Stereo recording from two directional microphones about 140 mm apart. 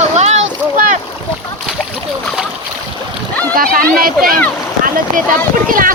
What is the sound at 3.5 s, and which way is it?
Speech, 90° right.